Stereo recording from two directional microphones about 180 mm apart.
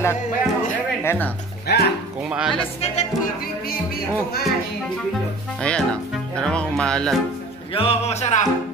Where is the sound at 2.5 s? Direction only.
30° left (ahead or behind).